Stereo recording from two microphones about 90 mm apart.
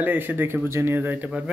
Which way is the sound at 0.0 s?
20° right (ahead or behind).